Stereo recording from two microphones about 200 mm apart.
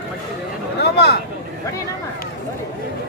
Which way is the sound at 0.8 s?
55° left (ahead or behind).